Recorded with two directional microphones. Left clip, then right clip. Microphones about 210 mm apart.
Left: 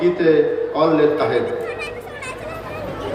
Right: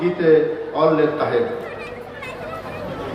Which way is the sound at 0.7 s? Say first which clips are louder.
Left 1 dB; 55° left (ahead or behind).